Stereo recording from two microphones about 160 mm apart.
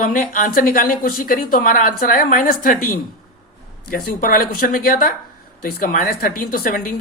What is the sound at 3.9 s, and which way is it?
A woman's voice, 65° left (ahead or behind).